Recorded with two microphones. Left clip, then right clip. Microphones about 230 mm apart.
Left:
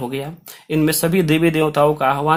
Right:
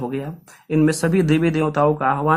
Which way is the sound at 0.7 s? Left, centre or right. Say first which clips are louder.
Left 1 dB; left.